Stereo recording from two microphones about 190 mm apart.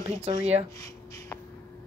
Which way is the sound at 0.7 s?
15° left (ahead or behind).